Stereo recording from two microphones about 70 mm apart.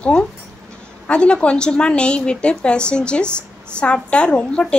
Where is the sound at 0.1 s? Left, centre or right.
Centre.